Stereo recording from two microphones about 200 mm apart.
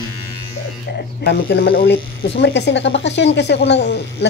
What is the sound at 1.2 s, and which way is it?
Speech, 55° left (ahead or behind).